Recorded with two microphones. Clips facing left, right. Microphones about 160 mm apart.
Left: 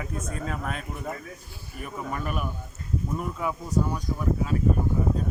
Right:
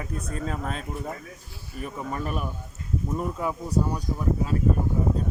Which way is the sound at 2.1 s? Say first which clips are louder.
Even; 30° right (ahead or behind).